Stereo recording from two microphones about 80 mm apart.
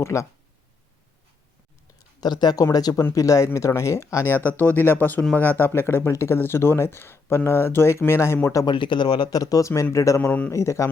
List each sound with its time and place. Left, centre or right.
0.0 s speech: left
2.0 s a sound: left
2.7 s speech: left
4.4 s speech: left
8.6 s speech: left
10.2 s speech: left
10.5 s speech: left